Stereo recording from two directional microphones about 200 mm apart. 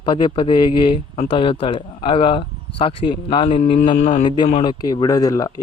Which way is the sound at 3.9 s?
35° left (ahead or behind).